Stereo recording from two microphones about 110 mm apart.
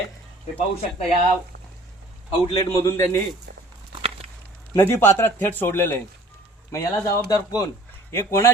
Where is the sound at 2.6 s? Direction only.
25° left (ahead or behind).